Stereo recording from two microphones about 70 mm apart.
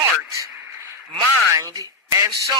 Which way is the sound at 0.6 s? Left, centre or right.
Right.